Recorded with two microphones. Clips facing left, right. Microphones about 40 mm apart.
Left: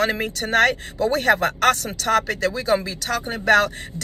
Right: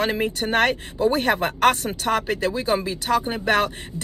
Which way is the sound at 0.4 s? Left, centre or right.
Right.